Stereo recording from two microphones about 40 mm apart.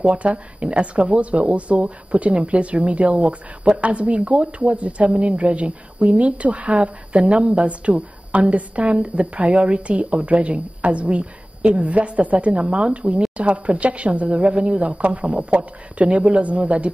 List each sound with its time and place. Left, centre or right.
0.0 s speech: right